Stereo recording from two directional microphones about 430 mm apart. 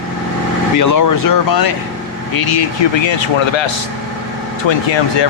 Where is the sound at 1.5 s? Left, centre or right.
Left.